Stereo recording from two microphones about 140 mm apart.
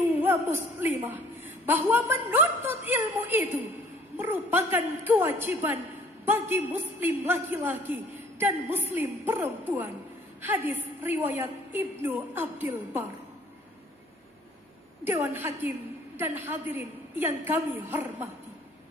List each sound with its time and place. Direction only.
0.2 s a man's voice: 15° right (ahead or behind)
15.0 s a man's voice: 20° right (ahead or behind)